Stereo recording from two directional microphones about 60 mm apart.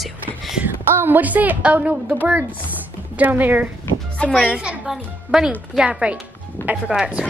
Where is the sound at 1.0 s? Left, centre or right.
Right.